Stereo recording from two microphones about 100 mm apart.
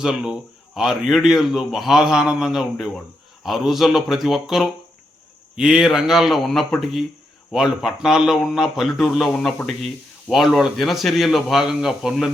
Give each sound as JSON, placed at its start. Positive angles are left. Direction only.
{"t": 0.0, "sound": "speech", "side_deg": -5}